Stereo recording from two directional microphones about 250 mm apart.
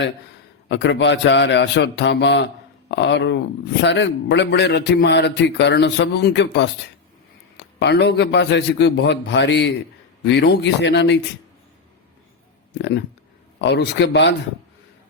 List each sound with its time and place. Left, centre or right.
0.7 s speech: left
13.6 s speech: left